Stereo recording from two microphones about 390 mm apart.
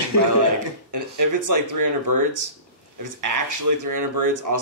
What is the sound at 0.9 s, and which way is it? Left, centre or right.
Speech, right.